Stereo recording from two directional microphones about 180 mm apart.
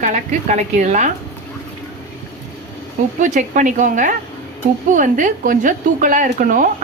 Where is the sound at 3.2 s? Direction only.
45° right (ahead or behind).